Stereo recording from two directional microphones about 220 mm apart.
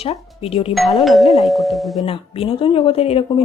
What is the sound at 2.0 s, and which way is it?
Speech, 25° left (ahead or behind).